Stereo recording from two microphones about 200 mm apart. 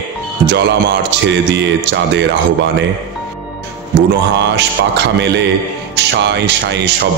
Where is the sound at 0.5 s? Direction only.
60° right (ahead or behind).